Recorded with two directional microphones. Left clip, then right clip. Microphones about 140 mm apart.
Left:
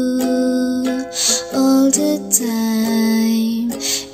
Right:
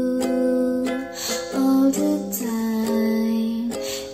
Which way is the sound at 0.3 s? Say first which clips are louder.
Left 3 dB; 35° left (ahead or behind).